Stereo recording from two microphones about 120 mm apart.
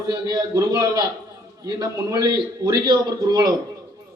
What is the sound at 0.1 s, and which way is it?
A man's voice, 35° right (ahead or behind).